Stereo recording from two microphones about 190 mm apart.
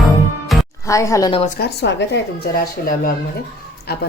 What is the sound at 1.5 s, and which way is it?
A woman's voice, 55° left (ahead or behind).